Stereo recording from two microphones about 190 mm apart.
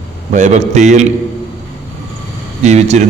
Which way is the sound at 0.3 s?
40° right (ahead or behind).